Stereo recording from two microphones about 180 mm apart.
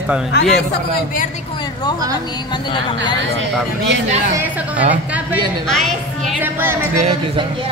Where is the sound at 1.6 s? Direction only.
25° left (ahead or behind).